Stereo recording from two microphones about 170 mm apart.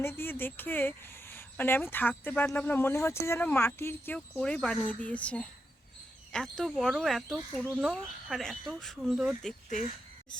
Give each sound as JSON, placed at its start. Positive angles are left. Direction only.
{"t": 0.0, "sound": "speech", "side_deg": 15}
{"t": 9.6, "sound": "speech", "side_deg": 45}